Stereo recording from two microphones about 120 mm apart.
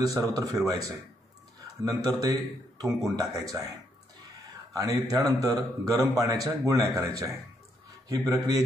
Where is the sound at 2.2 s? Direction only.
30° right (ahead or behind).